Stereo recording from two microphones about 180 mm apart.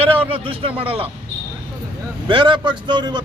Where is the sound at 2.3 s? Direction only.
25° right (ahead or behind).